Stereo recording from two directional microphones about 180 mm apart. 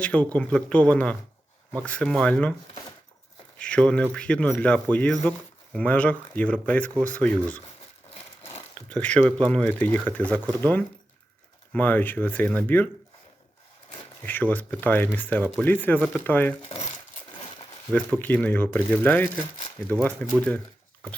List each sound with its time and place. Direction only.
0.0 s speech: 5° left (ahead or behind)
3.6 s speech: 5° left (ahead or behind)
8.9 s speech: 5° left (ahead or behind)
14.3 s speech: 10° left (ahead or behind)
16.6 s speech: 35° left (ahead or behind)
18.2 s speech: 10° left (ahead or behind)